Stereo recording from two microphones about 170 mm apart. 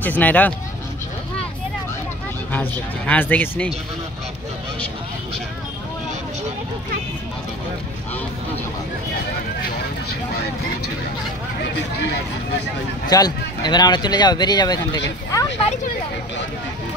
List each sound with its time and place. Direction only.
0.0 s speech: 10° left (ahead or behind)
3.1 s speech: 10° left (ahead or behind)
11.6 s speech: 85° left
13.0 s speech: 25° left (ahead or behind)